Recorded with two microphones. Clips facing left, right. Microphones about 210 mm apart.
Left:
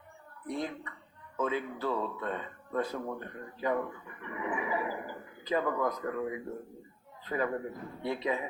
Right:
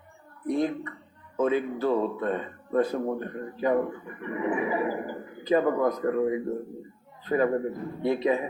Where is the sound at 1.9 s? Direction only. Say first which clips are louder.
Right 8 dB; 25° right (ahead or behind).